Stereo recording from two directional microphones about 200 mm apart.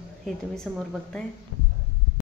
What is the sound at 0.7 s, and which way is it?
Speech, centre (ahead or behind).